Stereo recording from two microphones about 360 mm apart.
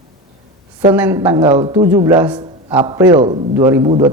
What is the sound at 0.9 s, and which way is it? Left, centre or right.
A man's voice, centre.